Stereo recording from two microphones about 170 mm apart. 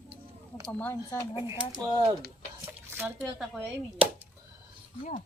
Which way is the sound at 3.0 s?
10° right (ahead or behind).